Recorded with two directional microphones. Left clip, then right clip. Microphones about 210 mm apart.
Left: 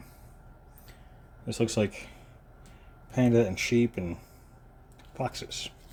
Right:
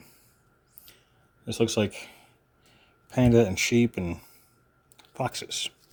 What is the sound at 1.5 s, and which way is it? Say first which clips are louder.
Speech: right 3 dB; 25° right (ahead or behind).